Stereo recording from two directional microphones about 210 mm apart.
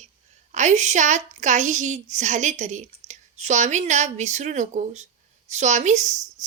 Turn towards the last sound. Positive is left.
turn(degrees=-35)  # may be behind; listen again after turning